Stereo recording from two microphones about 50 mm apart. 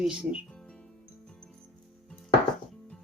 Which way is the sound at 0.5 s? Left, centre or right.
Centre.